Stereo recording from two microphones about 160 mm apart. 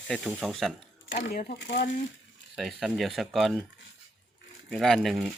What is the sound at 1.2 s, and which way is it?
Speech, 65° left (ahead or behind).